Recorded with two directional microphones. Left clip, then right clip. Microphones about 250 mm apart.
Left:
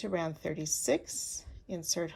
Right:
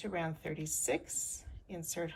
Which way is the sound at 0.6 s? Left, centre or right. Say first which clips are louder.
Left 5 dB; left.